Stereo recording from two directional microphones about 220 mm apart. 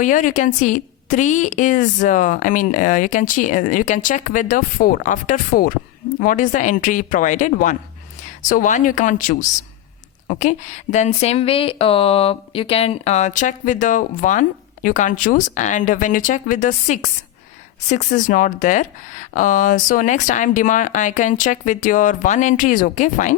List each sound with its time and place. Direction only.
0.0 s a woman's voice: 35° left (ahead or behind)